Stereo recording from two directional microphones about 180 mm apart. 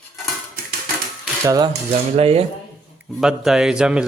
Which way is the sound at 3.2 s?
5° right (ahead or behind).